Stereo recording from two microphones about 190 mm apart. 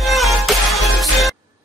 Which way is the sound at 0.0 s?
Centre (ahead or behind).